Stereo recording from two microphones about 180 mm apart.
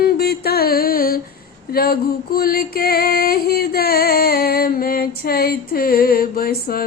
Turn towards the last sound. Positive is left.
turn(degrees=55)  # may be behind; listen again after turning